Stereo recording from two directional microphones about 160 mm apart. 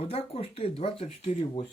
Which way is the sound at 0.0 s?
40° left (ahead or behind).